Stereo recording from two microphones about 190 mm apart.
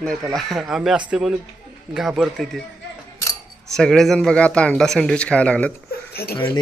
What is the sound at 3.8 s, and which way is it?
Speech, centre (ahead or behind).